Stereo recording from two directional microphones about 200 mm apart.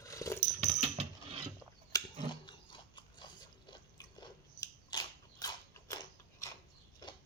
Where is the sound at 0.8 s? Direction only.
30° right (ahead or behind).